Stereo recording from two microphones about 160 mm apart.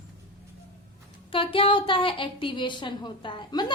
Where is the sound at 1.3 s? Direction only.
35° left (ahead or behind).